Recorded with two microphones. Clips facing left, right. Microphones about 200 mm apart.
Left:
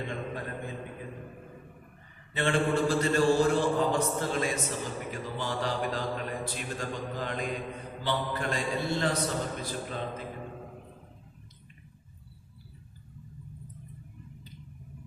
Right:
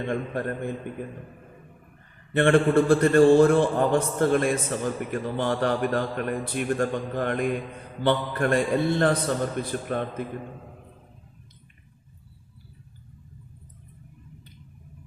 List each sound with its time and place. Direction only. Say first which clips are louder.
0.1 s a man's voice: right 8 dB; 55° right (ahead or behind)
2.3 s a man's voice: right 8 dB; 55° right (ahead or behind)